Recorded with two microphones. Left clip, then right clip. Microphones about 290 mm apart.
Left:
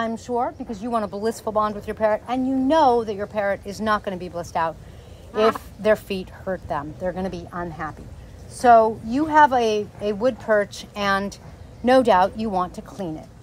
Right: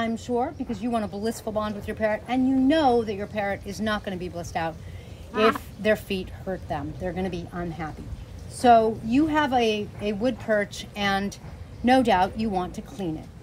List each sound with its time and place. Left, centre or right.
0.0 s speech: centre
5.3 s speech: centre
5.8 s speech: centre